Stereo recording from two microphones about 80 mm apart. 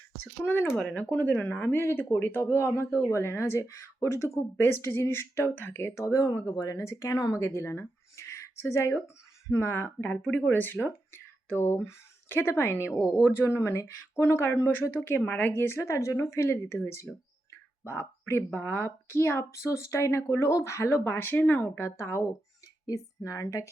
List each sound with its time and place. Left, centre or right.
0.4 s speech: left
6.1 s a woman's voice: left